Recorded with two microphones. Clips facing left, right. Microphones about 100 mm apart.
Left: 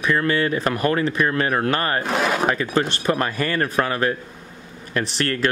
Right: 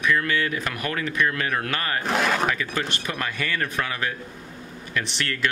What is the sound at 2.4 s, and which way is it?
Speech, 35° left (ahead or behind).